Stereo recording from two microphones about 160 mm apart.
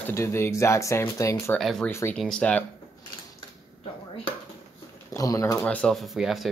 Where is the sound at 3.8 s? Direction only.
35° left (ahead or behind).